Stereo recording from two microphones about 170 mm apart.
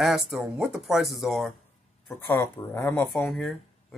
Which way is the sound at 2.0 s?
10° left (ahead or behind).